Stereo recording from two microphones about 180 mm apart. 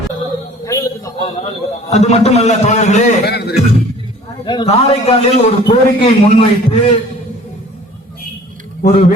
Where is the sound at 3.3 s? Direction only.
65° left (ahead or behind).